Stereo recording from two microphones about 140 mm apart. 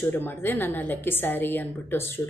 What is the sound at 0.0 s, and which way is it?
Mantra, 15° left (ahead or behind).